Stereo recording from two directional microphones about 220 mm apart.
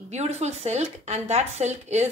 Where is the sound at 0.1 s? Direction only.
30° right (ahead or behind).